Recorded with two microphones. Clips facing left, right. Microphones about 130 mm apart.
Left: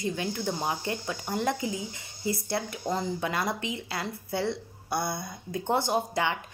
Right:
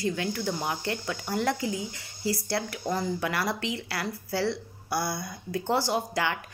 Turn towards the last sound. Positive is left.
turn(degrees=20)  # may be behind; listen again after turning